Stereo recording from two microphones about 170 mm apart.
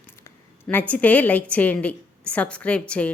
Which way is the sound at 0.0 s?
15° left (ahead or behind).